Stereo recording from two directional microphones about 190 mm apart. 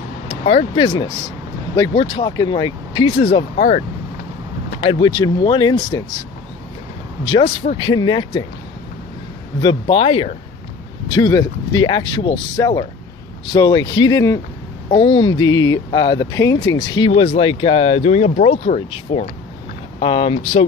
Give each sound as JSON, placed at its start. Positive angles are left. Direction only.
{"t": 0.3, "sound": "speech", "side_deg": 30}
{"t": 7.2, "sound": "speech", "side_deg": 25}
{"t": 9.6, "sound": "speech", "side_deg": 25}